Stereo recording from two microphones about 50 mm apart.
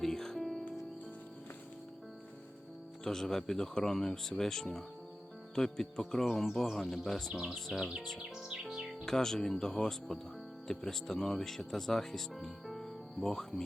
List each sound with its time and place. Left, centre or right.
0.0 s music: centre
3.0 s speech: centre
7.8 s music: centre
9.0 s speech: centre